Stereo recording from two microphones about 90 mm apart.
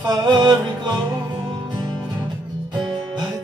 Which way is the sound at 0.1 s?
50° right (ahead or behind).